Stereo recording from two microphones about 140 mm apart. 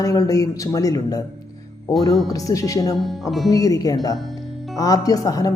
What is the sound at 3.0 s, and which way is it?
Speech, centre (ahead or behind).